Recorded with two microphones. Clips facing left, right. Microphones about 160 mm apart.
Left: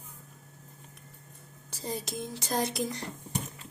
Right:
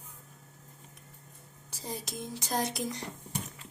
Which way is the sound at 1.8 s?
10° right (ahead or behind).